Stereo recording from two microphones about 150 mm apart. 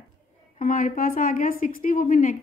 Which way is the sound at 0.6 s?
60° left (ahead or behind).